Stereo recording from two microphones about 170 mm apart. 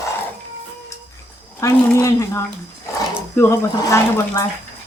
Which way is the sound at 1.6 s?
20° left (ahead or behind).